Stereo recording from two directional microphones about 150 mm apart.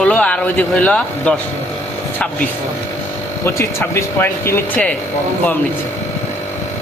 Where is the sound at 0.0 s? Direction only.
10° left (ahead or behind).